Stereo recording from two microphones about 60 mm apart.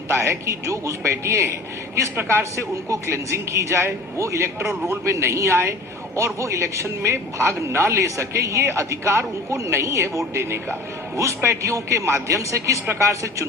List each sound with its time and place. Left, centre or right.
0.2 s speech: right
2.9 s a man's voice: right
11.4 s a man's voice: right
12.9 s speech: right